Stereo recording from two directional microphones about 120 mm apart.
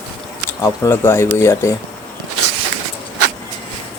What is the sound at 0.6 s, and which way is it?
Speech, 20° left (ahead or behind).